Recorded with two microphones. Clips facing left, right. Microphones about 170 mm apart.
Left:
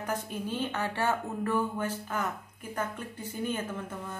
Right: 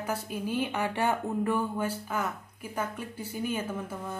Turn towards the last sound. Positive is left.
turn(degrees=-10)  # may be behind; listen again after turning